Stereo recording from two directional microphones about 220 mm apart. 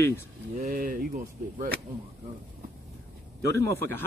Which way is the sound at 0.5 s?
35° right (ahead or behind).